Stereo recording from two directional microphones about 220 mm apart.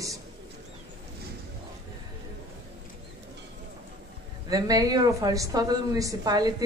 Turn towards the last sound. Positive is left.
turn(degrees=-15)  # may be behind; listen again after turning